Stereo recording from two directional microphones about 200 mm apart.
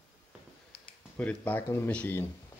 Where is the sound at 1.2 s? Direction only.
10° left (ahead or behind).